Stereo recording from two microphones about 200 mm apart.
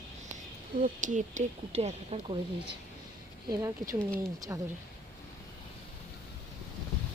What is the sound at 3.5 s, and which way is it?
Speech, 15° right (ahead or behind).